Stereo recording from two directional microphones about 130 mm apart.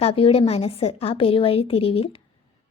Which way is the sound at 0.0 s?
50° left (ahead or behind).